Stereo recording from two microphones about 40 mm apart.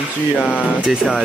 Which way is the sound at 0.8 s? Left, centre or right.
Centre.